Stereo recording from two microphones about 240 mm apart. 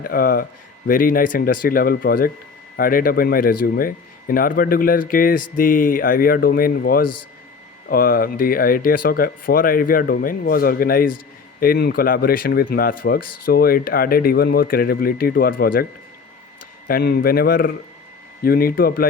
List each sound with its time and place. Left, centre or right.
0.0 s speech: left
7.0 s a man's voice: left
7.9 s speech: left
16.9 s speech: left